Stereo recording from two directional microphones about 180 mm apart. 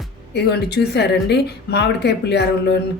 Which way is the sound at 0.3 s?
65° left (ahead or behind).